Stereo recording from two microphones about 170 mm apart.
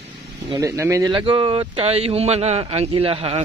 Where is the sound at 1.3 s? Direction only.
30° right (ahead or behind).